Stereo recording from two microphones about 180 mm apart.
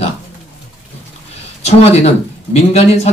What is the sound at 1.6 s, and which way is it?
Speech, 35° left (ahead or behind).